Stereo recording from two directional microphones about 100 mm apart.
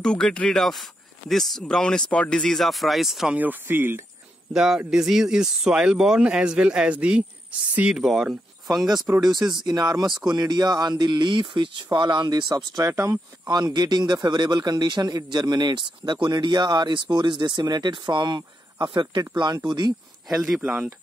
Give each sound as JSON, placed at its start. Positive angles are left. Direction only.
{"t": 0.0, "sound": "speech", "side_deg": 10}
{"t": 3.3, "sound": "speech", "side_deg": -20}
{"t": 4.6, "sound": "speech", "side_deg": -5}
{"t": 9.7, "sound": "a man's voice", "side_deg": -45}
{"t": 12.9, "sound": "speech", "side_deg": -30}
{"t": 13.5, "sound": "a man's voice", "side_deg": -45}
{"t": 20.2, "sound": "speech", "side_deg": -5}